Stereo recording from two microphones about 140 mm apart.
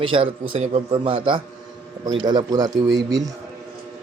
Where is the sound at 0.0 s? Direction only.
40° right (ahead or behind).